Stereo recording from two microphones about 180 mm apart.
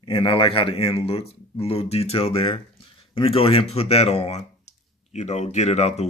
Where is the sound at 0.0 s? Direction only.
30° left (ahead or behind).